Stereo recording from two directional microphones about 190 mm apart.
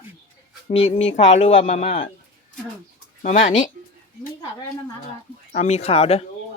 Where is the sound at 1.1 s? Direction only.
35° left (ahead or behind).